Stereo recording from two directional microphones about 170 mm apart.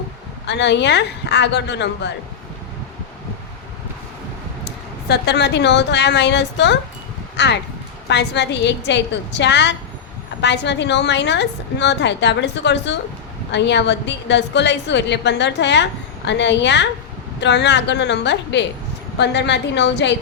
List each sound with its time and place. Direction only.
0.4 s a woman's voice: 90° left
4.6 s a woman's voice: 75° left (ahead or behind)